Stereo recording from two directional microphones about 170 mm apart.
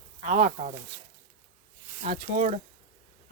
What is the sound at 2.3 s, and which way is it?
Speech, 50° right (ahead or behind).